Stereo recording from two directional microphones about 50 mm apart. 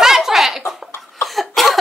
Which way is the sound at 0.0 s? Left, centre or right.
Centre.